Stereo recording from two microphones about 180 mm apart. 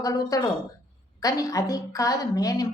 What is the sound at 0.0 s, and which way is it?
A woman's voice, 20° left (ahead or behind).